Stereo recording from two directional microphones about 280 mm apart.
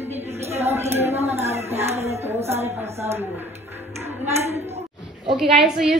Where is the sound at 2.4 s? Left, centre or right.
Right.